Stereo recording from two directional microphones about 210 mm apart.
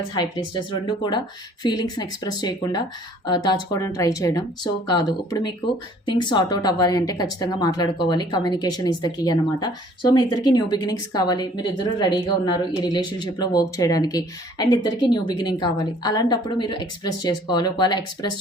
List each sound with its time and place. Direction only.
0.1 s a woman's voice: 20° left (ahead or behind)